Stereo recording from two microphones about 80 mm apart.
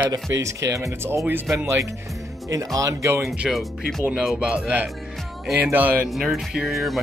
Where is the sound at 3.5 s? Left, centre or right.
Centre.